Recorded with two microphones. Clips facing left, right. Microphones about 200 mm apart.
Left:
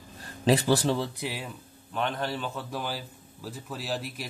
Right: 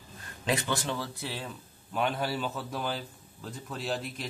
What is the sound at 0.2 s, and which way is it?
Speech, 35° left (ahead or behind).